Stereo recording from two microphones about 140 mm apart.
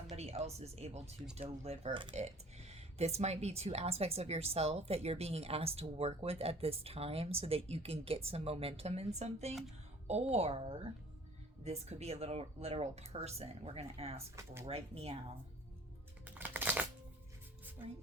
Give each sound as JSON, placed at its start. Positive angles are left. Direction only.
{"t": 0.2, "sound": "speech", "side_deg": -50}
{"t": 2.1, "sound": "speech", "side_deg": -50}
{"t": 16.2, "sound": "a sound", "side_deg": -15}